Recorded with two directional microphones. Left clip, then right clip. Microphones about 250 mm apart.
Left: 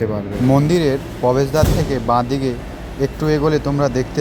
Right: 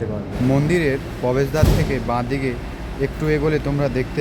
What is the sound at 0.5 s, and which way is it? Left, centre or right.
Speech, centre.